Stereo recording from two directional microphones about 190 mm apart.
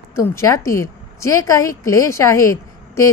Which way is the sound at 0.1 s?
15° left (ahead or behind).